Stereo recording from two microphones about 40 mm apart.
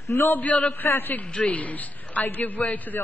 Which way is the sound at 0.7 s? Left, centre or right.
Left.